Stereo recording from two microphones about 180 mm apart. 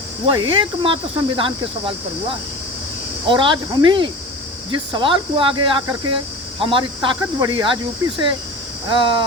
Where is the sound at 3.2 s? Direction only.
25° right (ahead or behind).